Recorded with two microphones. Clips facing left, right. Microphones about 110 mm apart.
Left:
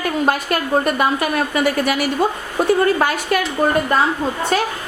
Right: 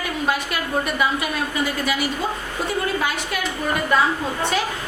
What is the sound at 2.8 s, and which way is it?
Speech, 50° left (ahead or behind).